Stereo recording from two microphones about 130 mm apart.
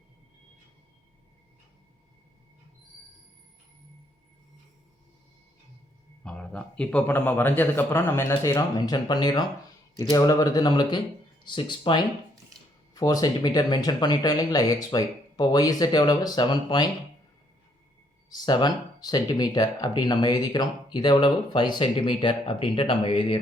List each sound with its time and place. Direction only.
6.2 s a man's voice: 5° left (ahead or behind); by 16.9 s 35° left (ahead or behind)
18.3 s speech: 35° left (ahead or behind)